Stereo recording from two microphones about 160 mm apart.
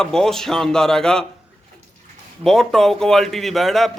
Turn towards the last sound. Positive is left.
turn(degrees=0)  # may be behind; listen again after turning